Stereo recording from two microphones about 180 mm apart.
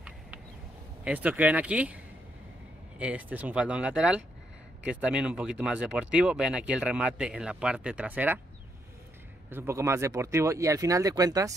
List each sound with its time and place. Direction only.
1.0 s speech: 10° right (ahead or behind)
3.0 s speech: 10° right (ahead or behind)
9.5 s speech: 15° right (ahead or behind)